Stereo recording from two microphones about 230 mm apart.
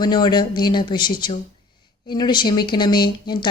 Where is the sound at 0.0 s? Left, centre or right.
Centre.